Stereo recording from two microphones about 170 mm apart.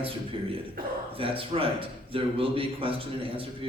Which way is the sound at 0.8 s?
60° right (ahead or behind).